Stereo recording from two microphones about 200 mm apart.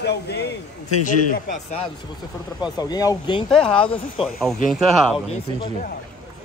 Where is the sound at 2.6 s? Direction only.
20° left (ahead or behind).